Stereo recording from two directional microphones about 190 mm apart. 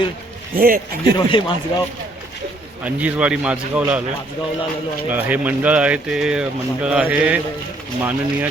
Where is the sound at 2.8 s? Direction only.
5° right (ahead or behind).